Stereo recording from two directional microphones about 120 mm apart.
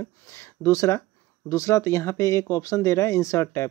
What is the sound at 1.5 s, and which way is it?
Speech, 25° left (ahead or behind).